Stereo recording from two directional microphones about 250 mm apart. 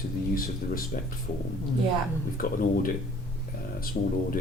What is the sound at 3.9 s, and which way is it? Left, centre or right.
Speech, left.